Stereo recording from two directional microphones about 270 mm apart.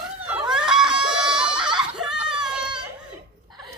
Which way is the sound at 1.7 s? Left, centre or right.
Centre.